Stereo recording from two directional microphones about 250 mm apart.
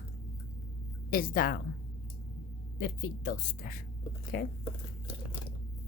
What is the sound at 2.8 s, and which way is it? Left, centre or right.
Speech, left.